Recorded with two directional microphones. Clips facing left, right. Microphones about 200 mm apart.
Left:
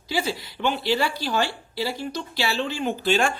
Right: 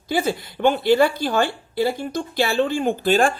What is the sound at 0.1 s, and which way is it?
A woman's voice, 50° right (ahead or behind).